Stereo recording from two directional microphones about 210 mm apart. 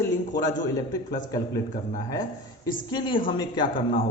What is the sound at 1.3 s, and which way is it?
Speech, 15° left (ahead or behind).